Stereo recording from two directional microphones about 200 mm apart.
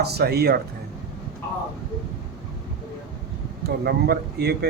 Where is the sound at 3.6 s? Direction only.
50° right (ahead or behind).